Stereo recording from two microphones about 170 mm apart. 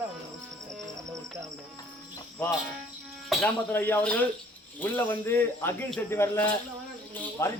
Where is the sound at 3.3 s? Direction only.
10° left (ahead or behind).